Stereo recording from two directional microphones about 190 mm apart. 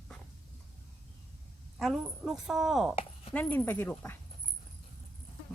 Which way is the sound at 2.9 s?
30° left (ahead or behind).